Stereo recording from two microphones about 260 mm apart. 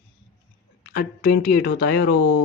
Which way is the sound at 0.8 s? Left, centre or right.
Left.